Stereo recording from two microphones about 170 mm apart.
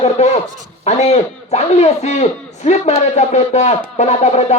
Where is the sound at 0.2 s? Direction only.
40° left (ahead or behind).